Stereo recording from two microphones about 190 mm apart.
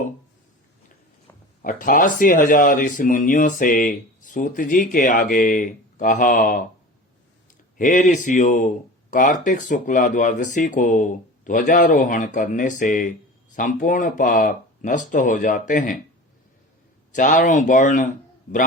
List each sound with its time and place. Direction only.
1.6 s speech: 45° left (ahead or behind)
7.8 s speech: 40° left (ahead or behind)
17.2 s speech: 45° left (ahead or behind)